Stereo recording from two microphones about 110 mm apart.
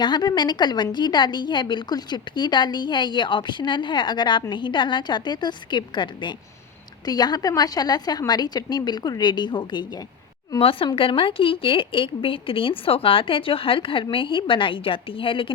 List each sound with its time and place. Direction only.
0.0 s a woman's voice: 40° left (ahead or behind)
10.6 s a woman's voice: 55° left (ahead or behind)